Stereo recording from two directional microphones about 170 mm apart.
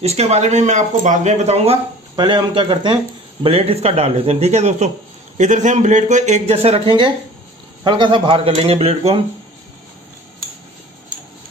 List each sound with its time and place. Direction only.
0.0 s speech: 40° right (ahead or behind)
2.1 s speech: 25° right (ahead or behind)